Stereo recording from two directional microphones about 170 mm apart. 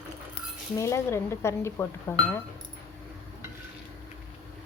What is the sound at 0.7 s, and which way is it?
Speech, 15° left (ahead or behind).